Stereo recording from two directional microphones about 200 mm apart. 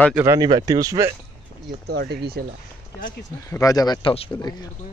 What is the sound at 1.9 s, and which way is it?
Speech, 55° right (ahead or behind).